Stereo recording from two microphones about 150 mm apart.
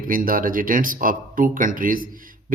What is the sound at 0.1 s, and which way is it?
Speech, 65° right (ahead or behind).